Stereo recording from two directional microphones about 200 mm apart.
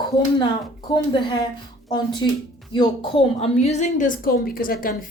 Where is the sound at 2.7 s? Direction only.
25° left (ahead or behind); by 5.0 s 45° left (ahead or behind).